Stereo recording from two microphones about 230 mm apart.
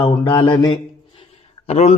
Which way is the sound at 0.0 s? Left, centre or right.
Centre.